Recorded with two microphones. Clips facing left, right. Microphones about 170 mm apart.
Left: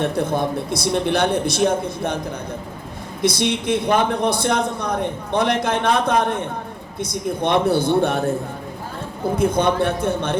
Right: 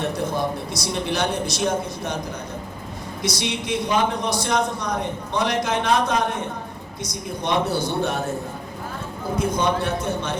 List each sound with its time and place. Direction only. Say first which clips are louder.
0.0 s a man's voice: left 4 dB; 55° left (ahead or behind)
3.2 s a man's voice: left 7 dB; 55° left (ahead or behind)
9.4 s a man's voice: left 4 dB; 55° left (ahead or behind)